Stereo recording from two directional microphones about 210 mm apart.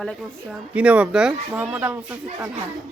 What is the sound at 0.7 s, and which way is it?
Speech, 5° right (ahead or behind).